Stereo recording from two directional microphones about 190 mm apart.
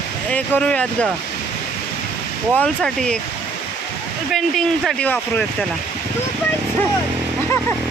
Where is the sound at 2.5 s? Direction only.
5° left (ahead or behind).